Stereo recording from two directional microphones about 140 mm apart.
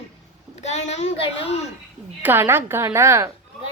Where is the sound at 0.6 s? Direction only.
55° left (ahead or behind).